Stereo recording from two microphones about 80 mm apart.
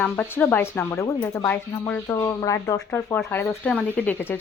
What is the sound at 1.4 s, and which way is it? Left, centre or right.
Speech, left.